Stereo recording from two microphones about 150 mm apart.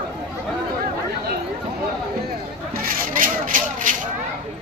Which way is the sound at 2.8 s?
65° right (ahead or behind).